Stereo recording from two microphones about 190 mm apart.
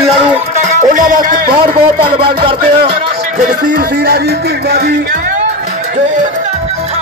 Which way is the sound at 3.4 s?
50° right (ahead or behind).